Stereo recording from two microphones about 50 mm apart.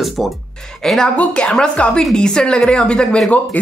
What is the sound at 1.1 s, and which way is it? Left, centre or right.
Speech, left.